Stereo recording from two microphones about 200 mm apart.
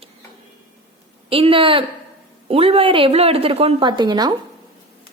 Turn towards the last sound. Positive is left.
turn(degrees=-20)  # may be behind; listen again after turning